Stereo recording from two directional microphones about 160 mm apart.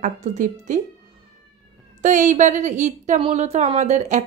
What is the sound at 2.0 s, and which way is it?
Speech, 50° right (ahead or behind).